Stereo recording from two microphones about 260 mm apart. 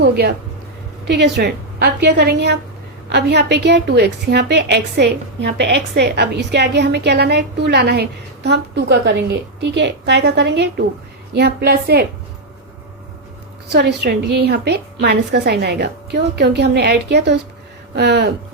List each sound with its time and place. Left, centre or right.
0.0 s a woman's voice: right
13.7 s a woman's voice: right